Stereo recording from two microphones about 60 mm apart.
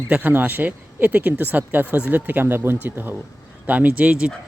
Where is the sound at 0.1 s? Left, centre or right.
Right.